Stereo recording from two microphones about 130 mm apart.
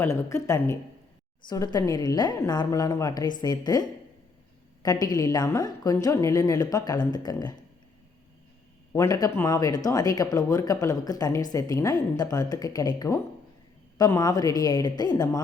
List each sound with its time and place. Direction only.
0.0 s speech: 20° left (ahead or behind)
8.9 s speech: 25° left (ahead or behind)